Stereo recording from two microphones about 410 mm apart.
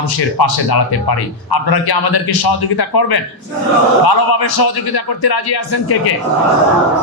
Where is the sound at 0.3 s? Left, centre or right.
Left.